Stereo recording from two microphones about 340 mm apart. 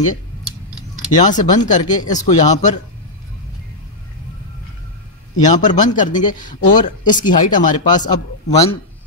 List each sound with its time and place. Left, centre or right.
1.1 s speech: left
5.4 s speech: left